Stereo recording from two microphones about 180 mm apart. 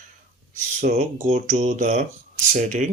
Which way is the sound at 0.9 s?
40° right (ahead or behind).